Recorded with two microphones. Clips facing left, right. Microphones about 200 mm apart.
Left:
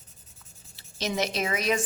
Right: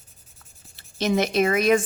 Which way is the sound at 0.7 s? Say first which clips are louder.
Right 7 dB; 55° right (ahead or behind).